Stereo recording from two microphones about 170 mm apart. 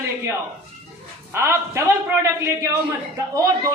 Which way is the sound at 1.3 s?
15° right (ahead or behind).